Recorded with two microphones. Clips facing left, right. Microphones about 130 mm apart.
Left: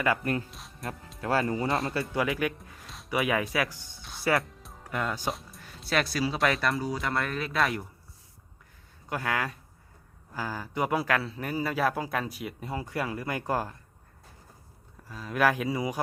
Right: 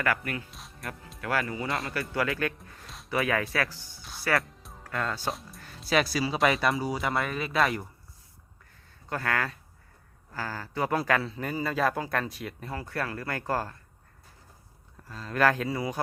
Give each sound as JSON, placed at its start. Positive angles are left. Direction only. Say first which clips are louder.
{"t": 0.5, "sound": "music", "louder": "even", "side_deg": 0}
{"t": 1.2, "sound": "speech", "louder": "left 3 dB", "side_deg": 30}
{"t": 1.9, "sound": "a man's voice", "louder": "left 1 dB", "side_deg": 20}
{"t": 3.1, "sound": "a man's voice", "louder": "even", "side_deg": 15}
{"t": 5.3, "sound": "speech", "louder": "even", "side_deg": 0}
{"t": 9.0, "sound": "a man's voice", "louder": "even", "side_deg": 10}
{"t": 15.1, "sound": "a man's voice", "louder": "right 1 dB", "side_deg": 10}